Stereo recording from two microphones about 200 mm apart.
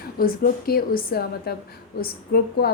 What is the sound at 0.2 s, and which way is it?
A woman's voice, 45° left (ahead or behind).